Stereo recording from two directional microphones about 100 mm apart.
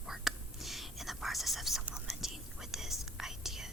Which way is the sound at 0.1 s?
Centre (ahead or behind).